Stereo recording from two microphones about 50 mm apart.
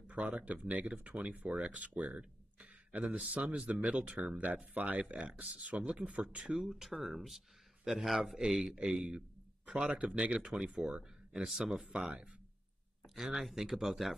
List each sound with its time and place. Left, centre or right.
0.0 s speech: right
6.2 s speech: centre
13.1 s speech: centre